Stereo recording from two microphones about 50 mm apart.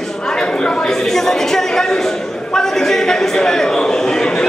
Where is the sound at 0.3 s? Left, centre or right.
Centre.